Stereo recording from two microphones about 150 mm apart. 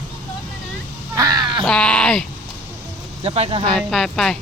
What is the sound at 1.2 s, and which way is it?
Crow, 25° right (ahead or behind).